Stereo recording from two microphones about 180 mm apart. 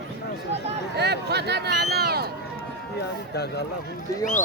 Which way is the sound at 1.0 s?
65° right (ahead or behind).